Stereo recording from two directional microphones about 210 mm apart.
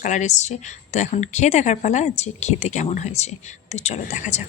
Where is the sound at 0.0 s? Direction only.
35° left (ahead or behind).